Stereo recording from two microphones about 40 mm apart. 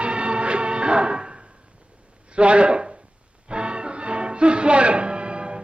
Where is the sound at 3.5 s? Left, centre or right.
Right.